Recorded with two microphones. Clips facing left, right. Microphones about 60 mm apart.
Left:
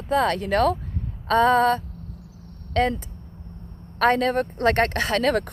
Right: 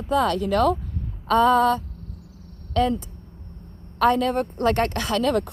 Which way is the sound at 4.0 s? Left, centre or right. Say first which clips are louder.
Even; left.